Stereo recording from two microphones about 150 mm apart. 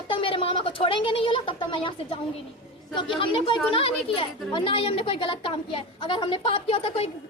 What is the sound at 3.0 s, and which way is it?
Speech, 35° left (ahead or behind).